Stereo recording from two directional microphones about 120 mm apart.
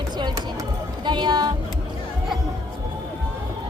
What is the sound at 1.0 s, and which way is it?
Music, 40° right (ahead or behind).